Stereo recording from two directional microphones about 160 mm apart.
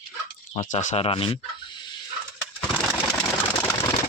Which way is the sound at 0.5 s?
50° left (ahead or behind).